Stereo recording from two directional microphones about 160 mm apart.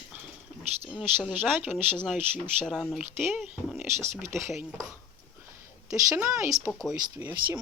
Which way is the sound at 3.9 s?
15° right (ahead or behind).